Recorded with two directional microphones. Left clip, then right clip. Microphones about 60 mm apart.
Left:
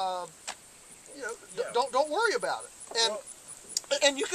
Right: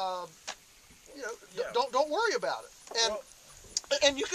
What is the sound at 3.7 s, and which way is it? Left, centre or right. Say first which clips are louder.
Speech: left 1 dB; centre.